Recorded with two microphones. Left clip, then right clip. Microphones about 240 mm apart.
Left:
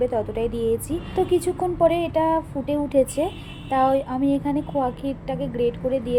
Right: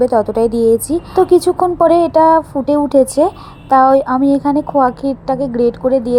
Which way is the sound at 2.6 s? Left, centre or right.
Right.